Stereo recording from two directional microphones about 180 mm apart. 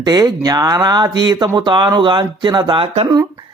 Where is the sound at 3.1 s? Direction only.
25° right (ahead or behind).